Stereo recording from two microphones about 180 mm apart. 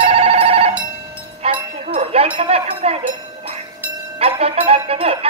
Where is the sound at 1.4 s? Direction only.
35° right (ahead or behind).